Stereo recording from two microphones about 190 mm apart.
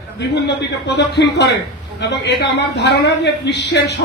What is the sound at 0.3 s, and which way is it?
A man's voice, 65° left (ahead or behind).